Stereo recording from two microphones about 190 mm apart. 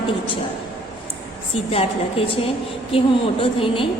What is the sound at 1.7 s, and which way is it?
A woman's voice, 30° left (ahead or behind).